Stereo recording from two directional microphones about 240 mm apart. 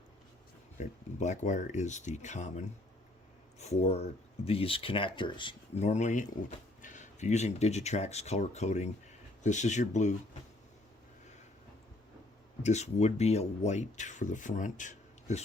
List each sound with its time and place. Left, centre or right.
0.8 s speech: left
12.6 s speech: left